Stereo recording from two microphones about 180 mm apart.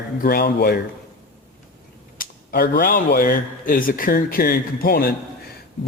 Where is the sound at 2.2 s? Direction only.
55° left (ahead or behind).